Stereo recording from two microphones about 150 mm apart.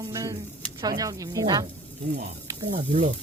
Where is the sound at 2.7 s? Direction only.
55° right (ahead or behind).